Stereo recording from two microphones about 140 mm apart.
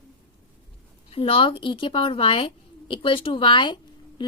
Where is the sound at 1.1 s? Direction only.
40° left (ahead or behind).